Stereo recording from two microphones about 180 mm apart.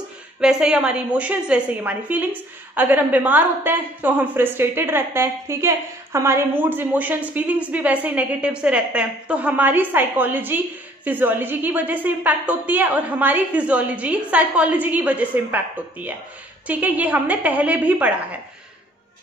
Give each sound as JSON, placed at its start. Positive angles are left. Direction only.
{"t": 0.4, "sound": "a woman's voice", "side_deg": -5}